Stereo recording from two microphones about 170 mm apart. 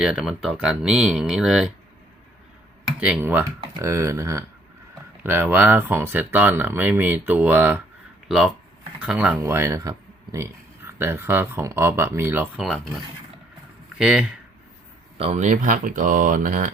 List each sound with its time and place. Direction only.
0.0 s speech: 5° right (ahead or behind)
3.0 s speech: 10° right (ahead or behind)
12.6 s speech: centre (ahead or behind)
14.0 s speech: 5° right (ahead or behind)
15.2 s speech: 40° right (ahead or behind)